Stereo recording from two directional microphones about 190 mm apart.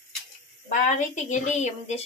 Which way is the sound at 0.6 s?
40° left (ahead or behind).